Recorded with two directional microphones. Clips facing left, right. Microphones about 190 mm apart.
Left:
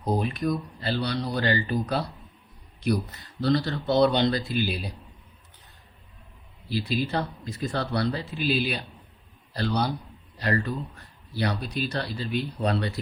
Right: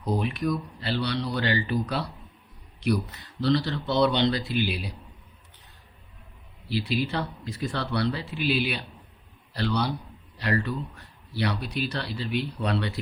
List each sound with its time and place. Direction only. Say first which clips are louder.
0.0 s speech: left 1 dB; 45° left (ahead or behind)
3.4 s speech: even; 45° left (ahead or behind)
6.7 s a man's voice: even; 45° left (ahead or behind)